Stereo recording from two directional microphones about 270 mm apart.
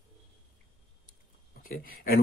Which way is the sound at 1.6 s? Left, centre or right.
Left.